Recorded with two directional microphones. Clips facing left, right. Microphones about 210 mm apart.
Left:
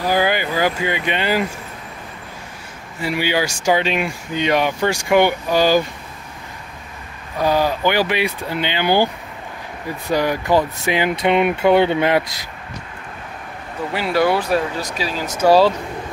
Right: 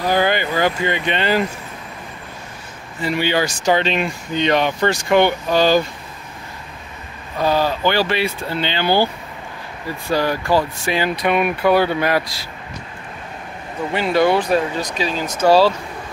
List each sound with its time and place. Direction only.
0.0 s speech: 10° left (ahead or behind)
3.0 s speech: 10° left (ahead or behind)
7.3 s speech: 10° left (ahead or behind)
10.1 s speech: 15° left (ahead or behind)
13.9 s speech: 5° left (ahead or behind)